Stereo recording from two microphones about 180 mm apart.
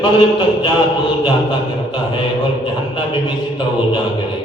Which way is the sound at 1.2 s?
25° left (ahead or behind).